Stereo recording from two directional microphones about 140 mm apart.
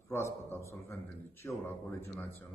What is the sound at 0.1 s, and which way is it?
A man's voice, 20° left (ahead or behind).